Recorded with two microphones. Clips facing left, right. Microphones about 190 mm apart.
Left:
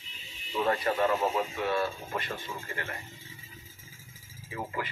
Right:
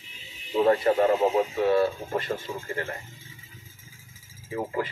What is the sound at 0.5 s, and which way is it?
Speech, 35° right (ahead or behind).